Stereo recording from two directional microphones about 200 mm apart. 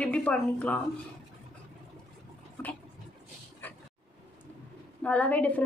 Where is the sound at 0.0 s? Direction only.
5° left (ahead or behind).